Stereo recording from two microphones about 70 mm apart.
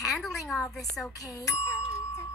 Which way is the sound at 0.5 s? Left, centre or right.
Centre.